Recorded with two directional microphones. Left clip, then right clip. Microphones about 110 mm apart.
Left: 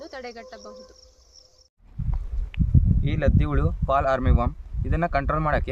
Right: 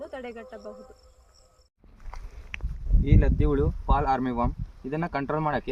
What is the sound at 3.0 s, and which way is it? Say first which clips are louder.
Speech: right 1 dB; 30° left (ahead or behind).